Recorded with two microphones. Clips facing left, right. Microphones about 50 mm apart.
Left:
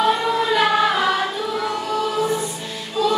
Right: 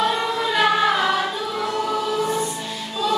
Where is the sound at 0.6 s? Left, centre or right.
Centre.